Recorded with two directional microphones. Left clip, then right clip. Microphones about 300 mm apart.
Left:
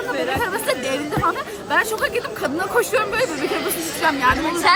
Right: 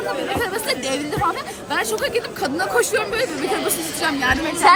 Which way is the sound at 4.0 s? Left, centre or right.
Centre.